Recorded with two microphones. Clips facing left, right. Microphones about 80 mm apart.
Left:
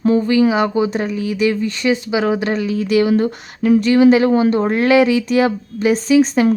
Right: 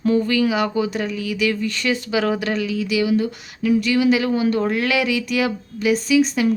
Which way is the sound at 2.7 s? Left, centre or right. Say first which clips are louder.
Left 6 dB; left.